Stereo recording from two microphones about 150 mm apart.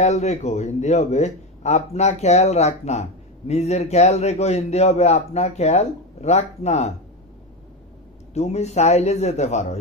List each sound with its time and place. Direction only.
0.0 s a man's voice: 50° left (ahead or behind)
8.3 s a man's voice: 45° left (ahead or behind)